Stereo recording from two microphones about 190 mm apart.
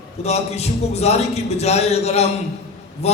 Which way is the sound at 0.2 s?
35° left (ahead or behind).